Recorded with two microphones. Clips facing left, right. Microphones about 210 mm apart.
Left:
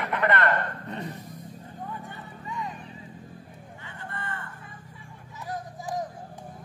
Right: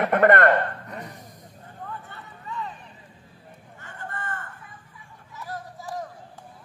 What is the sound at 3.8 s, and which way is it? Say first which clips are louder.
Vehicle: right 3 dB; 45° right (ahead or behind).